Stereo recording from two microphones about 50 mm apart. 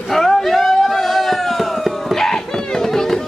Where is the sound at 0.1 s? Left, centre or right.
Centre.